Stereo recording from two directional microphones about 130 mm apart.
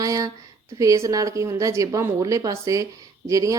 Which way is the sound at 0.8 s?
25° right (ahead or behind).